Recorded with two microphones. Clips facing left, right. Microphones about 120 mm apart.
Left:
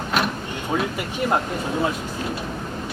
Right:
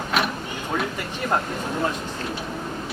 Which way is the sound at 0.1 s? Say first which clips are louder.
Left 1 dB; centre (ahead or behind).